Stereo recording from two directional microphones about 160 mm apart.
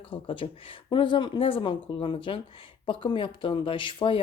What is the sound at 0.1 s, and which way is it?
A woman's voice, 30° left (ahead or behind).